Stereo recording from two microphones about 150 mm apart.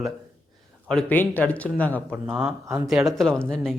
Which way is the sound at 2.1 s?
5° right (ahead or behind).